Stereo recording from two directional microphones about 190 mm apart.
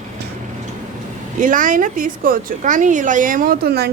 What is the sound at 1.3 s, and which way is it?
Speech, 45° right (ahead or behind).